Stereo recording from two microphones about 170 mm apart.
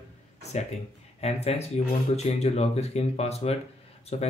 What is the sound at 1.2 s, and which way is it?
Speech, 35° left (ahead or behind).